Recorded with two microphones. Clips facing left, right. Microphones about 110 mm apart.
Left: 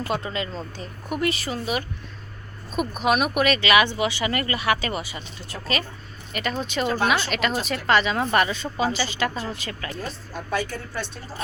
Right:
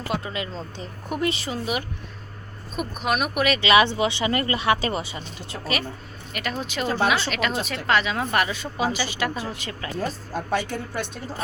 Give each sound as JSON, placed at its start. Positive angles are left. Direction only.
{"t": 0.1, "sound": "a woman's voice", "side_deg": -10}
{"t": 0.8, "sound": "speech", "side_deg": -25}
{"t": 2.7, "sound": "speech", "side_deg": 0}
{"t": 3.6, "sound": "speech", "side_deg": -30}
{"t": 6.3, "sound": "a woman's voice", "side_deg": -5}